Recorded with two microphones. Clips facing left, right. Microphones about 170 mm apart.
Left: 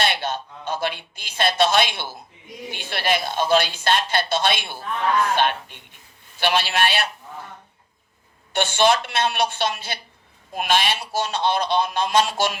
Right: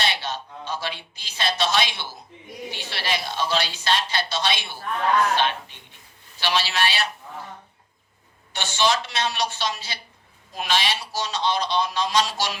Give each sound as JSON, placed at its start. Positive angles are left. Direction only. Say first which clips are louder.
{"t": 0.0, "sound": "a woman's voice", "louder": "left 4 dB", "side_deg": 55}
{"t": 8.5, "sound": "a woman's voice", "louder": "left 5 dB", "side_deg": 55}